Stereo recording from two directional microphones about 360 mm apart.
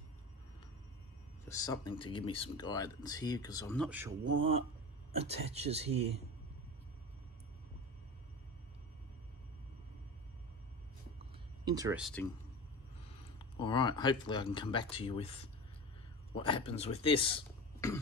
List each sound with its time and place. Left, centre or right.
1.5 s speech: centre
4.3 s speech: centre
11.6 s speech: centre
13.4 s speech: centre